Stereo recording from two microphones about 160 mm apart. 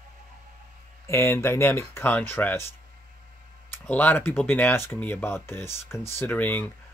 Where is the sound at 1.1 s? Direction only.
15° left (ahead or behind).